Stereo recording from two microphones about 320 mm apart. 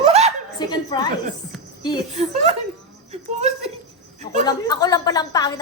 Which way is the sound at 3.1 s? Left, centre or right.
Centre.